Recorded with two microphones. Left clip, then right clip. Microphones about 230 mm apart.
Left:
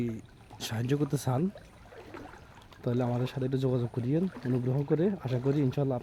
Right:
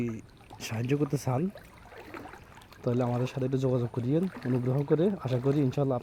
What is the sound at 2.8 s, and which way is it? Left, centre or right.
Speech, centre.